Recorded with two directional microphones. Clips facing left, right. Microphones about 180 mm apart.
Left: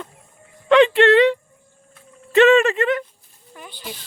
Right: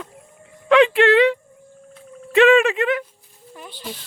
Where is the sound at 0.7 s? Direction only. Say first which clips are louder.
Left 1 dB; centre (ahead or behind).